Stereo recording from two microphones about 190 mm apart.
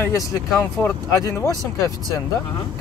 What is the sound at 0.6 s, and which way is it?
Speech, 10° left (ahead or behind).